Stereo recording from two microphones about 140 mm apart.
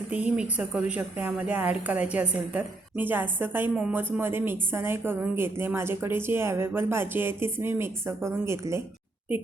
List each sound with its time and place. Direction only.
0.1 s a woman's voice: 10° right (ahead or behind)